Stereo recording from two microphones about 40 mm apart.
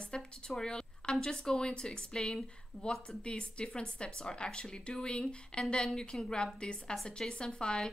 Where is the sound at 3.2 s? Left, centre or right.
Left.